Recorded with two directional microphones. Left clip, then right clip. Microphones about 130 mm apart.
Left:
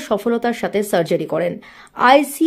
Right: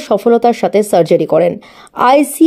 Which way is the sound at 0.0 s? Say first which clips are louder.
Right 9 dB; 25° right (ahead or behind).